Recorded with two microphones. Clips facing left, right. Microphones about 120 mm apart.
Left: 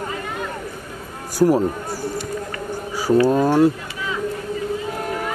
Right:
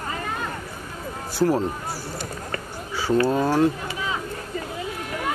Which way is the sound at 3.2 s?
10° left (ahead or behind).